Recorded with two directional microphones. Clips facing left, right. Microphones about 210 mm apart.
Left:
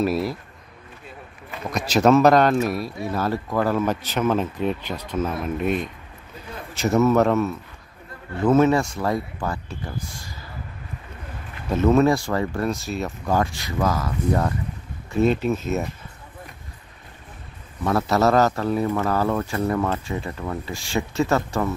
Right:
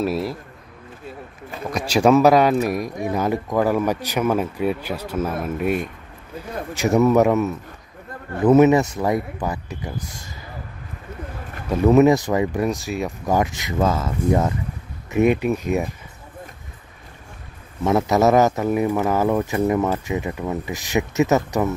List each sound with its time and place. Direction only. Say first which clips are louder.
0.0 s speech: even; 5° right (ahead or behind)
1.7 s speech: right 1 dB; 10° right (ahead or behind)
11.7 s speech: right 3 dB; 15° right (ahead or behind)
17.8 s speech: right 3 dB; 20° right (ahead or behind)